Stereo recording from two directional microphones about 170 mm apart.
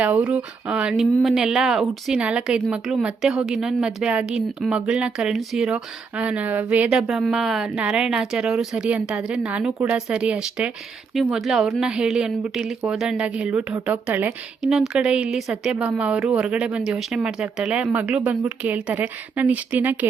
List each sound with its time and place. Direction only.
0.0 s a woman's voice: 5° right (ahead or behind)